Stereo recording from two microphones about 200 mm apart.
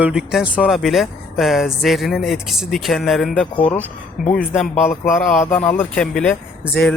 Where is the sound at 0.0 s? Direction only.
5° right (ahead or behind).